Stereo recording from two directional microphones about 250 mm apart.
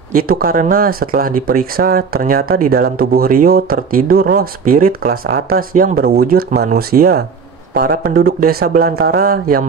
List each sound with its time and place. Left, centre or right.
0.1 s speech: right